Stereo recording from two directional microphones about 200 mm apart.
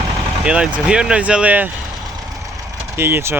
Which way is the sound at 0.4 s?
5° right (ahead or behind).